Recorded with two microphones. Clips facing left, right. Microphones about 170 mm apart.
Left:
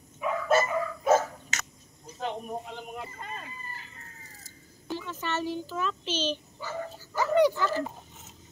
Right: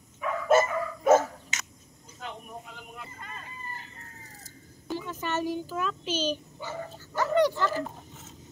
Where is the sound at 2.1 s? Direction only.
30° left (ahead or behind).